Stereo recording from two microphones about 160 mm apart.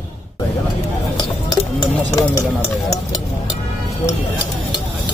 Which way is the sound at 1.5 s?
25° left (ahead or behind).